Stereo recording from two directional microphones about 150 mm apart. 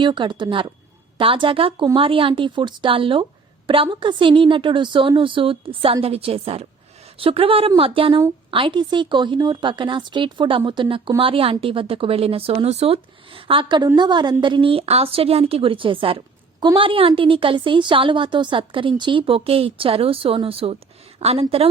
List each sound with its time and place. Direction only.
0.0 s a woman's voice: 30° right (ahead or behind)